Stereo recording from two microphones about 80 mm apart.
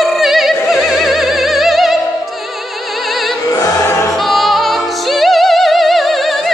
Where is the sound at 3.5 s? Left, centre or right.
Left.